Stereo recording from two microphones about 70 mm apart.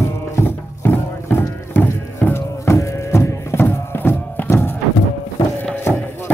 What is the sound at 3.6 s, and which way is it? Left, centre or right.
Music, left.